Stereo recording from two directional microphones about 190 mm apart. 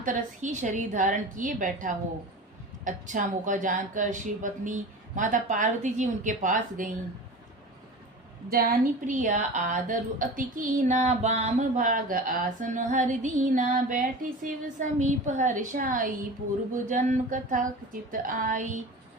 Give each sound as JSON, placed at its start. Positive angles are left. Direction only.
{"t": 0.0, "sound": "a woman's voice", "side_deg": -40}
{"t": 8.4, "sound": "a woman's voice", "side_deg": -50}